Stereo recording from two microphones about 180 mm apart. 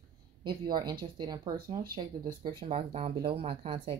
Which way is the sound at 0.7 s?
20° right (ahead or behind).